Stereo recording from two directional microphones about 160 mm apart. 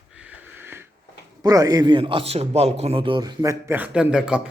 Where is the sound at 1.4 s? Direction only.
20° right (ahead or behind).